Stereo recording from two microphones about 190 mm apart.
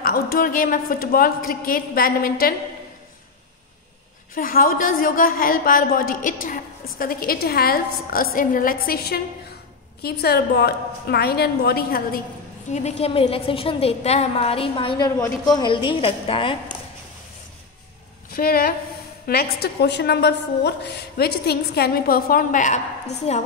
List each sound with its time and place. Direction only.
0.0 s a woman's voice: 50° left (ahead or behind)
4.4 s a woman's voice: 50° left (ahead or behind)
12.6 s a woman's voice: 35° left (ahead or behind)
18.3 s a woman's voice: 50° left (ahead or behind)